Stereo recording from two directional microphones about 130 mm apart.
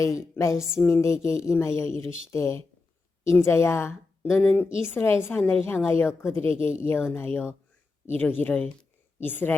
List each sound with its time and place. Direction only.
0.0 s a woman's voice: 20° left (ahead or behind)